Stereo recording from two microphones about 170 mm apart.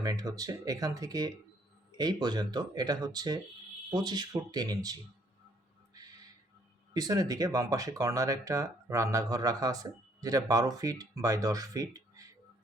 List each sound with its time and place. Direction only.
0.0 s speech: 20° right (ahead or behind)
6.9 s speech: 20° right (ahead or behind)